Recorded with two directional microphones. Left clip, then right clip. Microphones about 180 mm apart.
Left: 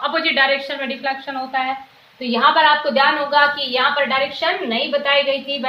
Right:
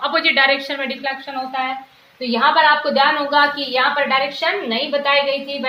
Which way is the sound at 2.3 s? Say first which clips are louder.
Even; 20° right (ahead or behind).